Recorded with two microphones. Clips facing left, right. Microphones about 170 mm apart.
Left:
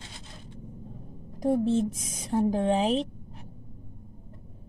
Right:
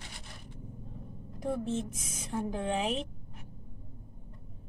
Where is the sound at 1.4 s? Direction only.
35° left (ahead or behind).